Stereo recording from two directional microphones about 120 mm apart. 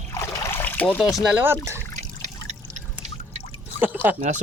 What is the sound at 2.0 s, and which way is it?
Water, 75° right (ahead or behind).